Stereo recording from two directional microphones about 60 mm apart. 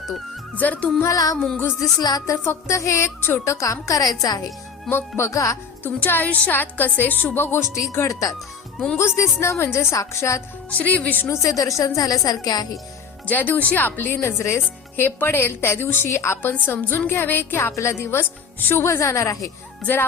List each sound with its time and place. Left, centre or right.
0.5 s speech: left
1.0 s a woman's voice: left
2.3 s a woman's voice: left
4.9 s speech: left
5.3 s speech: left
5.8 s speech: left
8.0 s a woman's voice: left
9.0 s a woman's voice: left
10.7 s speech: left
11.4 s a woman's voice: left
13.2 s speech: left
15.0 s a woman's voice: left
16.5 s a woman's voice: left